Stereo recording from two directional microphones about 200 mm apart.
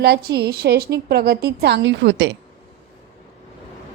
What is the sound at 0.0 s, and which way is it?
A woman's voice, 55° right (ahead or behind).